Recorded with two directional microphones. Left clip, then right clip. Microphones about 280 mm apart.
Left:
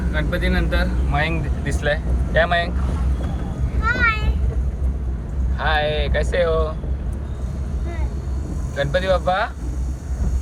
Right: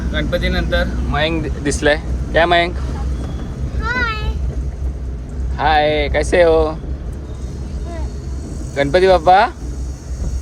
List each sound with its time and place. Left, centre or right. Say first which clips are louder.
0.1 s speech: right 4 dB; centre
1.1 s speech: right 5 dB; right
3.8 s a sound: left 1 dB; centre
5.5 s speech: right 7 dB; right
8.7 s speech: right 8 dB; right